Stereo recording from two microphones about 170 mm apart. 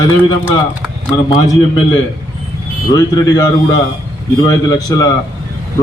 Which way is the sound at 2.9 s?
25° left (ahead or behind).